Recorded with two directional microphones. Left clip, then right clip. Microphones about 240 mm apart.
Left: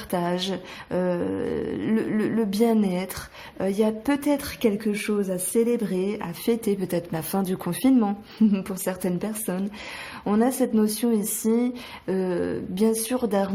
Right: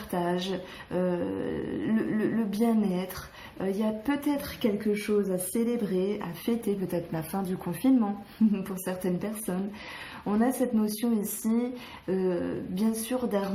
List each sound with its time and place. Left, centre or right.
0.1 s speech: left